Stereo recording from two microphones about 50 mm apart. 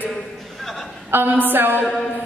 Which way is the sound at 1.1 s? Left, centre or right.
Right.